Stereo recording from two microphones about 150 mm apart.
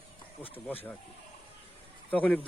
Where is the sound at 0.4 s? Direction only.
40° left (ahead or behind).